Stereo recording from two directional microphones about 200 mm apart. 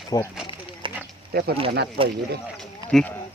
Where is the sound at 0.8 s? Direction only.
25° right (ahead or behind).